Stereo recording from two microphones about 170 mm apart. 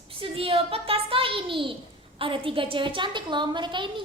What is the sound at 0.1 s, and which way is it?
A child's voice, 35° right (ahead or behind).